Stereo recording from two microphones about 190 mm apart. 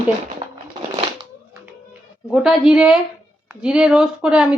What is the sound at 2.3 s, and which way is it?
A woman's voice, 5° right (ahead or behind).